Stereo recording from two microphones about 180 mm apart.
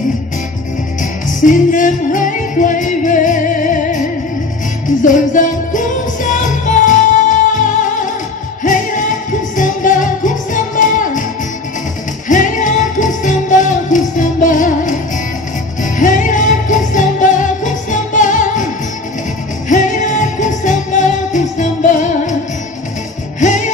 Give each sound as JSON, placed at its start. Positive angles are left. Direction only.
{"t": 1.4, "sound": "music", "side_deg": 45}
{"t": 5.0, "sound": "music", "side_deg": 45}
{"t": 12.3, "sound": "music", "side_deg": 45}
{"t": 19.7, "sound": "music", "side_deg": 45}
{"t": 23.4, "sound": "music", "side_deg": 45}